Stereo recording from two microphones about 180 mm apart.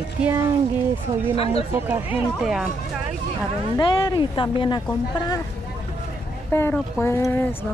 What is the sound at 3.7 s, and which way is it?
Speech, 25° left (ahead or behind).